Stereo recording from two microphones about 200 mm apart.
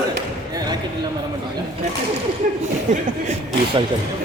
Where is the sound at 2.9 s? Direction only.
35° right (ahead or behind).